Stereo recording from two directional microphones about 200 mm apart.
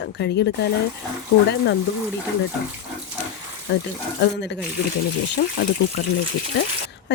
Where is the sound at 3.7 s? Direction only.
55° left (ahead or behind).